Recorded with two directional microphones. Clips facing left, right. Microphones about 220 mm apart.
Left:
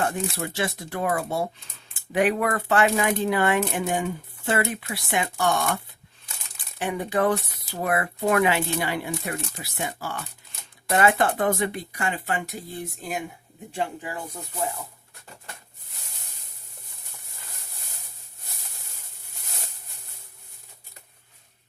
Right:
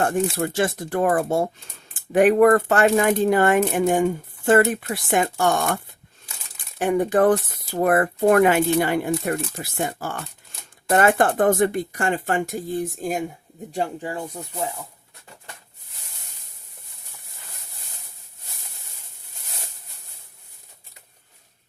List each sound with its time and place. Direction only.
0.0 s speech: 50° right (ahead or behind)
13.7 s speech: 35° right (ahead or behind)
14.4 s speech: 15° right (ahead or behind)